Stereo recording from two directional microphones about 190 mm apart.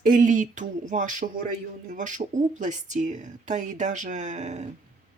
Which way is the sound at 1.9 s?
40° right (ahead or behind).